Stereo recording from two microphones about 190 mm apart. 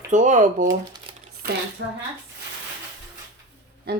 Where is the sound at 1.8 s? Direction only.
70° right (ahead or behind).